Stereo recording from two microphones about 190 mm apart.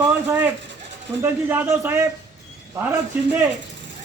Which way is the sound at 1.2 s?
10° right (ahead or behind).